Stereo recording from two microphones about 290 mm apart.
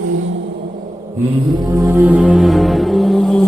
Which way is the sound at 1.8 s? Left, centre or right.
Centre.